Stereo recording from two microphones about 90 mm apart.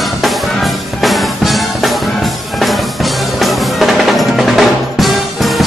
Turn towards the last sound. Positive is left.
turn(degrees=0)  # may be behind; listen again after turning